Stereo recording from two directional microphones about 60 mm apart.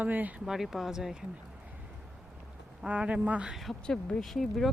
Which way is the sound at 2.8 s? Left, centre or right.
Centre.